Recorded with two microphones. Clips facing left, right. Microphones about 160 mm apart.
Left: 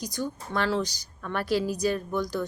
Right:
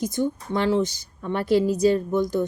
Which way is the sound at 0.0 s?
20° right (ahead or behind).